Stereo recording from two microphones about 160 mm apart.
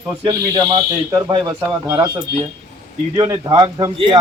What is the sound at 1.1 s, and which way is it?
Speech, 25° right (ahead or behind).